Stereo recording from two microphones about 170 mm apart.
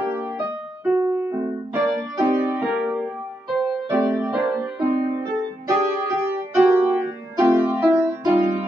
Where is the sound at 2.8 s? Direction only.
5° right (ahead or behind).